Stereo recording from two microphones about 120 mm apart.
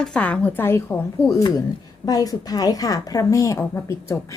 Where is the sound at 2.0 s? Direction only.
30° left (ahead or behind).